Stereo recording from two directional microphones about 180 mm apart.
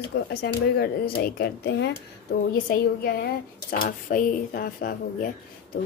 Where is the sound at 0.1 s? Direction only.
65° left (ahead or behind).